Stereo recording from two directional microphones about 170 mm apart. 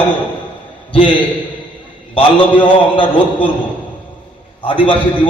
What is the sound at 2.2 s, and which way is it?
Speech, 30° left (ahead or behind).